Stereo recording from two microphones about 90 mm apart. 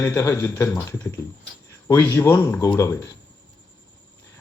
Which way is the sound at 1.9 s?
25° left (ahead or behind).